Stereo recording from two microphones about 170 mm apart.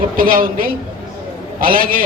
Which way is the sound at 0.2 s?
55° right (ahead or behind).